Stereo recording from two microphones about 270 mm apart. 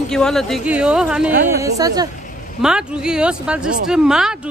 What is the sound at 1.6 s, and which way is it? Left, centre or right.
Speech, centre.